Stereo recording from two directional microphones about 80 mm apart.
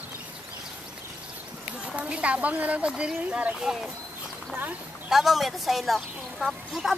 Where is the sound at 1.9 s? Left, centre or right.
Centre.